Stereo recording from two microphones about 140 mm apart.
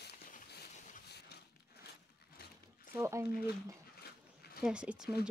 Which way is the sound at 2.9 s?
20° right (ahead or behind).